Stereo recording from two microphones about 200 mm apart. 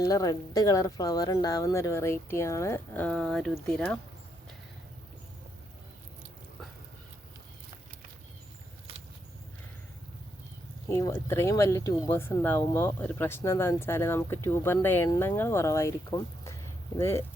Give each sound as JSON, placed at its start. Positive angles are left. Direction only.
{"t": 0.0, "sound": "speech", "side_deg": 20}
{"t": 8.9, "sound": "a sound", "side_deg": -30}
{"t": 10.8, "sound": "speech", "side_deg": 15}